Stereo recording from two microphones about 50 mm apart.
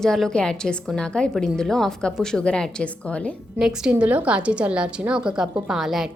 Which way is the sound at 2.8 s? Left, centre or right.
Left.